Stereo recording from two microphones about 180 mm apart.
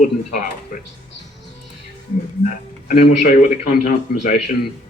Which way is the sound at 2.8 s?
45° left (ahead or behind).